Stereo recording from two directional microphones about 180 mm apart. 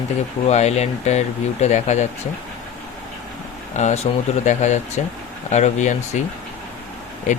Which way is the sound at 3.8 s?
40° left (ahead or behind).